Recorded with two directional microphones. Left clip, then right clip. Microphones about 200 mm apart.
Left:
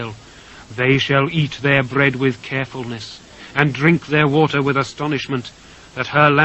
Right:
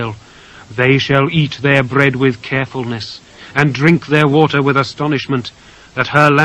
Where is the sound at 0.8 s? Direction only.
20° left (ahead or behind).